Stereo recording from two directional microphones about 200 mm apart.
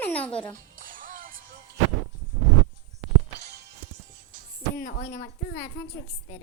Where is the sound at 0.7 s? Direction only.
45° right (ahead or behind).